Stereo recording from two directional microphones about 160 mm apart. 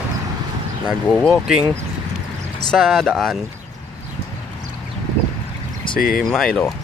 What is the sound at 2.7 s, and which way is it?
Speech, centre (ahead or behind).